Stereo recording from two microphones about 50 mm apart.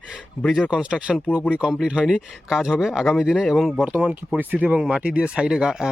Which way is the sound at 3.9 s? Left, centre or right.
Right.